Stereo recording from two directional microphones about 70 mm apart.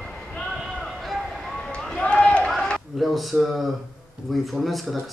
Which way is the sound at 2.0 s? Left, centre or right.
Centre.